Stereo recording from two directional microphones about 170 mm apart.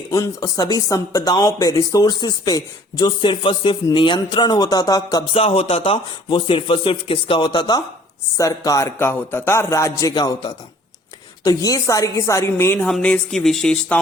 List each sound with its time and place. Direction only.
0.1 s speech: 20° left (ahead or behind)
5.4 s a woman's voice: 35° left (ahead or behind); by 14.0 s 5° left (ahead or behind)